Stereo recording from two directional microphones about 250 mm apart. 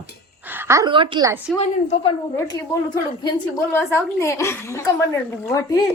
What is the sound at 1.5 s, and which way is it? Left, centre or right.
Speech, left.